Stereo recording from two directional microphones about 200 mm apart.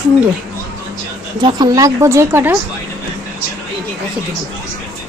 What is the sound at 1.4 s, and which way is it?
Speech, 20° right (ahead or behind).